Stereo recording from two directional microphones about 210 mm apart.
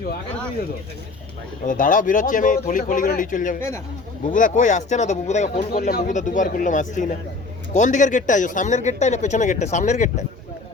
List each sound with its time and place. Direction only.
1.6 s speech: 40° left (ahead or behind)